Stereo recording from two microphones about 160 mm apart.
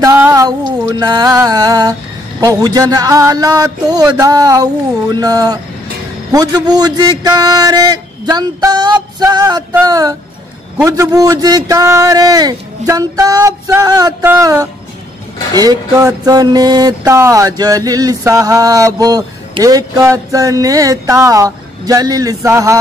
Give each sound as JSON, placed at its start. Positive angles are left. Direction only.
{"t": 0.0, "sound": "music", "side_deg": -20}
{"t": 2.4, "sound": "mantra", "side_deg": -25}